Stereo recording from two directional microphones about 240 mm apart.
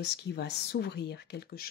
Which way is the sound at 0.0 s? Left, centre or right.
Left.